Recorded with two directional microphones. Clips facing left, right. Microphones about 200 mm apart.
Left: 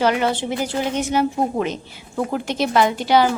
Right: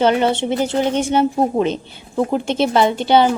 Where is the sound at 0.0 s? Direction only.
25° right (ahead or behind).